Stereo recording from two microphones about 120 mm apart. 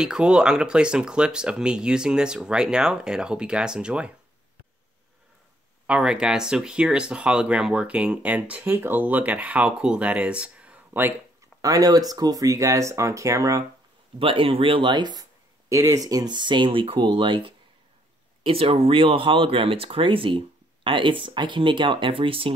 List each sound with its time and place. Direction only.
0.0 s speech: 5° right (ahead or behind)
5.9 s speech: 5° right (ahead or behind)
11.6 s speech: 30° right (ahead or behind)
14.1 s speech: 45° right (ahead or behind)
15.7 s speech: 25° right (ahead or behind); by 22.5 s 50° right (ahead or behind)